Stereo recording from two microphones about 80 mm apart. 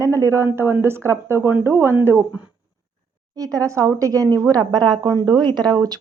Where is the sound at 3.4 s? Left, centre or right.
Right.